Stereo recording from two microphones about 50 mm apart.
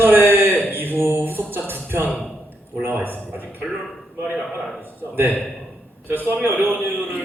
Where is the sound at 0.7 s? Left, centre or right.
Right.